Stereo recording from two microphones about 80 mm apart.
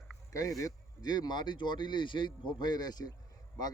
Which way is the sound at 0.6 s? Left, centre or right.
Left.